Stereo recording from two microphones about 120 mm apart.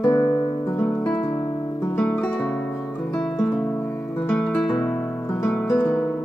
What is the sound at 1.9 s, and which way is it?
Music, 5° left (ahead or behind).